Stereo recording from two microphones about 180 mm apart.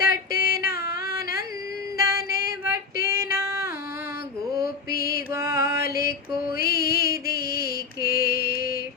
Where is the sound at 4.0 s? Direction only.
55° left (ahead or behind).